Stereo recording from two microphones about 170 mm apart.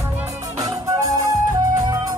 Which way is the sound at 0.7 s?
20° right (ahead or behind).